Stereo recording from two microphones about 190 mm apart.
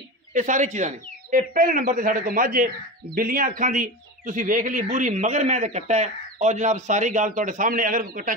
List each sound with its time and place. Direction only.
0.3 s speech: 40° right (ahead or behind)